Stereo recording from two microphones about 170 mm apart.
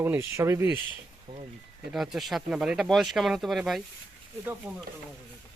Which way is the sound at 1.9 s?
Centre (ahead or behind).